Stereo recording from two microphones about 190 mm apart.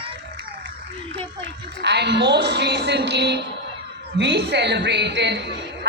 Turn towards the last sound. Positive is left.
turn(degrees=-65)  # may be behind; listen again after turning